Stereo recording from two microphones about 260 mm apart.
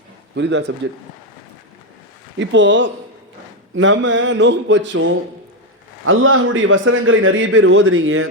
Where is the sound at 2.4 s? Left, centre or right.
Right.